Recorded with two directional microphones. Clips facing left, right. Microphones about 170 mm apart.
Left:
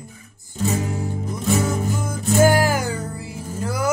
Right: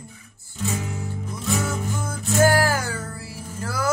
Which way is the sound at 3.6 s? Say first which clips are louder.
Left 3 dB; 20° left (ahead or behind).